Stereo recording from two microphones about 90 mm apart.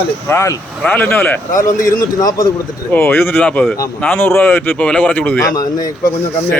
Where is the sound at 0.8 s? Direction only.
15° left (ahead or behind).